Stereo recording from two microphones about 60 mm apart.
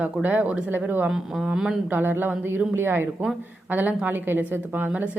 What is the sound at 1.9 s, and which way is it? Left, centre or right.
A woman's voice, right.